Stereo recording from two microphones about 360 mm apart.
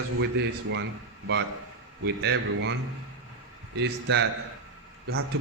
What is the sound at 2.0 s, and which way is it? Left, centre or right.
Speech, right.